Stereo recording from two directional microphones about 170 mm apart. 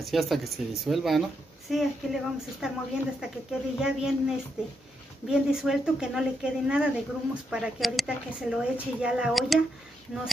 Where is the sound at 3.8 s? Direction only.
5° right (ahead or behind).